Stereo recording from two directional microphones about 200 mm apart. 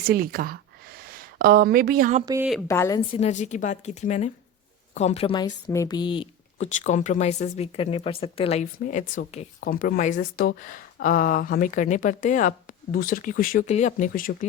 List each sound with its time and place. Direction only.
0.0 s speech: 45° right (ahead or behind)
2.2 s speech: 15° right (ahead or behind)
2.6 s a woman's voice: 15° left (ahead or behind)
3.1 s a woman's voice: 30° left (ahead or behind)
6.7 s speech: 35° left (ahead or behind)